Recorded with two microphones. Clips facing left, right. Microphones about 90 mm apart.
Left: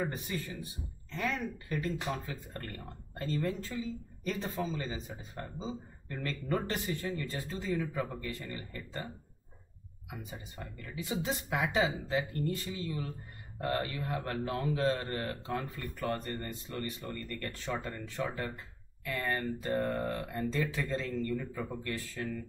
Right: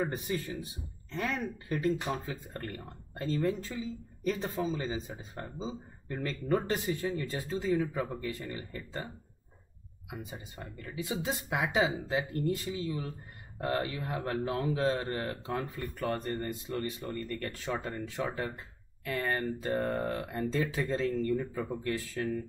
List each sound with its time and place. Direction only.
0.0 s speech: 20° right (ahead or behind)